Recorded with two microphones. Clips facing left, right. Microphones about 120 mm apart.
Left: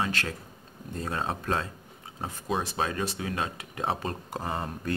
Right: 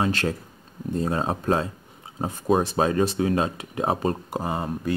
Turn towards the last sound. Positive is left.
turn(degrees=-10)  # may be behind; listen again after turning